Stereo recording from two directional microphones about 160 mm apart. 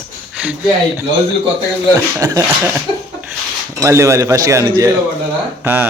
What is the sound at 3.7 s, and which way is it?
Speech, 15° right (ahead or behind).